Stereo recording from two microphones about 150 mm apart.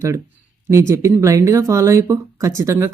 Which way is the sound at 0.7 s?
20° right (ahead or behind).